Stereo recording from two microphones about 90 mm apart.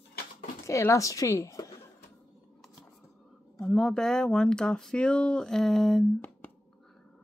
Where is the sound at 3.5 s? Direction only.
5° left (ahead or behind).